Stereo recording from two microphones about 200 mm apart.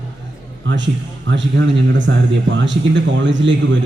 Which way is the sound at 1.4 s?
65° right (ahead or behind).